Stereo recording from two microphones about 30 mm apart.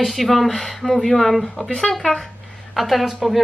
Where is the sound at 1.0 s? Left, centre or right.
Centre.